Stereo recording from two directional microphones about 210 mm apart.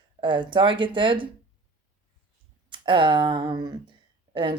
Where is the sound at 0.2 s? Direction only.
25° right (ahead or behind).